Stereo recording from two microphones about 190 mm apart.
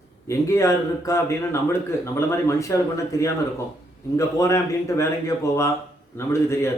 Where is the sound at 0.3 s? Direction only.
15° left (ahead or behind).